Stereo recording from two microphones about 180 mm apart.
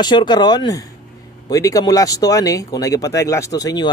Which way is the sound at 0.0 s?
25° left (ahead or behind).